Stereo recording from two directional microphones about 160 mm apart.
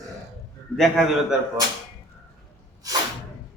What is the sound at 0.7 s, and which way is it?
Speech, centre (ahead or behind).